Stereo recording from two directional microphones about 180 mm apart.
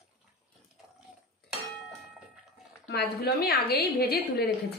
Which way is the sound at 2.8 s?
65° left (ahead or behind).